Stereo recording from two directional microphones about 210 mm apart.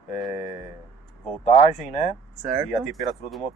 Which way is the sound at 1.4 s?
35° left (ahead or behind).